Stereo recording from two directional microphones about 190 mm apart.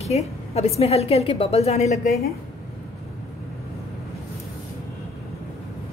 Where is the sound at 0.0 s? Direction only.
35° left (ahead or behind).